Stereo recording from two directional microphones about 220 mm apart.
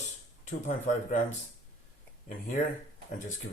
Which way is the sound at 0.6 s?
35° left (ahead or behind).